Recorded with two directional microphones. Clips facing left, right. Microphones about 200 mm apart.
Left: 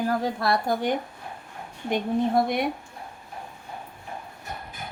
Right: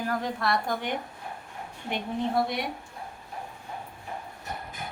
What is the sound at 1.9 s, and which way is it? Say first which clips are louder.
Speech: left 6 dB; 50° left (ahead or behind).